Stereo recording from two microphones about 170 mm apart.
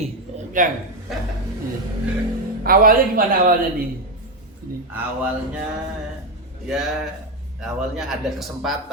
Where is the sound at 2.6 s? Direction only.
55° right (ahead or behind).